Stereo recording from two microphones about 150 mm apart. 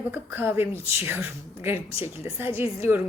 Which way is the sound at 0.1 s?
15° right (ahead or behind).